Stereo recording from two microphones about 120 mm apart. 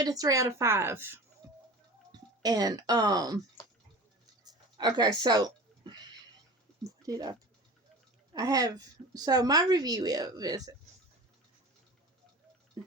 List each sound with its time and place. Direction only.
0.0 s a woman's voice: 30° right (ahead or behind)
2.4 s a woman's voice: 30° right (ahead or behind)
4.4 s a sound: 35° right (ahead or behind)
7.0 s a woman's voice: 30° right (ahead or behind)
12.8 s tick-tock: 40° right (ahead or behind)